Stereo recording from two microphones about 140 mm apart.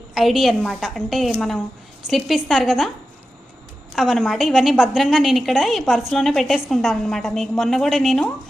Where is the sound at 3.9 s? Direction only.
Centre (ahead or behind).